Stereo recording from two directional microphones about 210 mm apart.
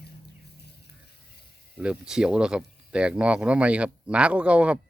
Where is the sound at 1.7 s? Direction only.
5° right (ahead or behind).